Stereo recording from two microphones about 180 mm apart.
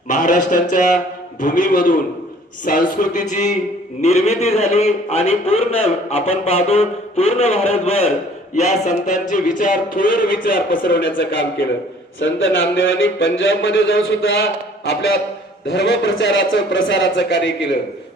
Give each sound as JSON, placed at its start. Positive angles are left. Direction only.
{"t": 0.1, "sound": "a man's voice", "side_deg": 45}
{"t": 10.8, "sound": "a man's voice", "side_deg": 65}
{"t": 12.2, "sound": "speech", "side_deg": 90}
{"t": 15.7, "sound": "a man's voice", "side_deg": 75}